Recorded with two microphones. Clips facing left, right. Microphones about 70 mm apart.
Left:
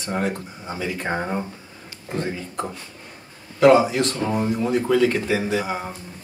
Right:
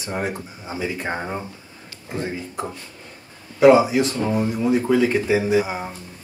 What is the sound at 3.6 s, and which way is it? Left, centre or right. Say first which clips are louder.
Speech: right 1 dB; centre.